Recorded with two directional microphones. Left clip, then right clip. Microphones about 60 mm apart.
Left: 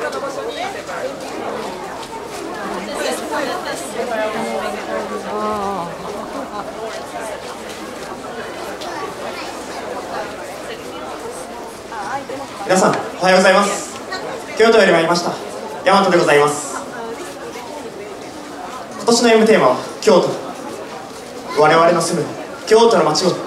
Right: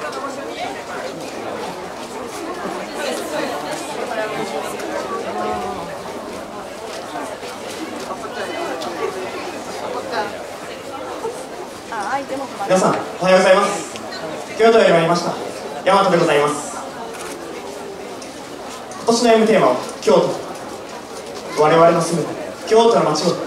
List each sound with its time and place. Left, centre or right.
12.6 s a man's voice: left
19.0 s a man's voice: left
21.5 s a man's voice: left